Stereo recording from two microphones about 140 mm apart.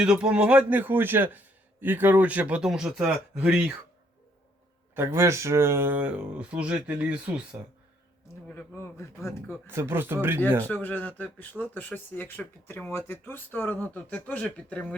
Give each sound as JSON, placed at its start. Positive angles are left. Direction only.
{"t": 0.0, "sound": "a man's voice", "side_deg": -5}
{"t": 4.9, "sound": "a man's voice", "side_deg": -20}
{"t": 8.4, "sound": "speech", "side_deg": 15}
{"t": 9.6, "sound": "a man's voice", "side_deg": -15}
{"t": 10.7, "sound": "speech", "side_deg": 10}